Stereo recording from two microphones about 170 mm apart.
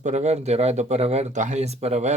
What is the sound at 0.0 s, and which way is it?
Speech, 40° right (ahead or behind).